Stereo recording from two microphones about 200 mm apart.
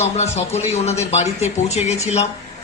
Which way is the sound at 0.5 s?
35° left (ahead or behind).